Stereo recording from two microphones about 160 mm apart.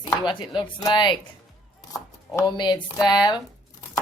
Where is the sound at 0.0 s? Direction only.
30° left (ahead or behind).